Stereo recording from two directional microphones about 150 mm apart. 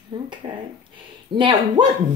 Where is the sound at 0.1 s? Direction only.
30° right (ahead or behind).